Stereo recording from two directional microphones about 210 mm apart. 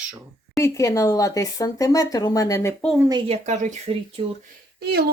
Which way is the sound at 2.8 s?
Centre (ahead or behind).